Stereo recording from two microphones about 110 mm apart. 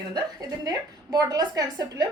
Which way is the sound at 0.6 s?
35° right (ahead or behind).